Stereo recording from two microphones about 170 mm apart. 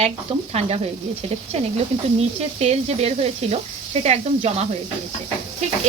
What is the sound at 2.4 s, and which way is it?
Speech, 40° right (ahead or behind).